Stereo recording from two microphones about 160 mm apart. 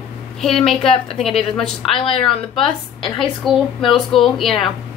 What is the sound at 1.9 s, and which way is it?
Speech, 35° left (ahead or behind).